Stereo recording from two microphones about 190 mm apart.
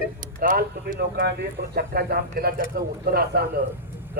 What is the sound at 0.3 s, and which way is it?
A man's voice, 50° right (ahead or behind).